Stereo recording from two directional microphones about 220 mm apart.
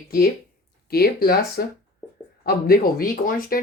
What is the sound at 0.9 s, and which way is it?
Speech, 45° left (ahead or behind).